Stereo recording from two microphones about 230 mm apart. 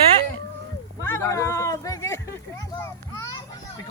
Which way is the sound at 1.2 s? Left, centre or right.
Centre.